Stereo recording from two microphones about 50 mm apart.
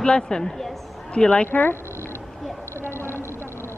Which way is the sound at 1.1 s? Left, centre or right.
Left.